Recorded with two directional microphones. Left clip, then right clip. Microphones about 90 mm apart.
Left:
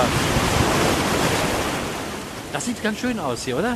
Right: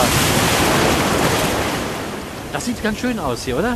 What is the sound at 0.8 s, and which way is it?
Waves, centre (ahead or behind).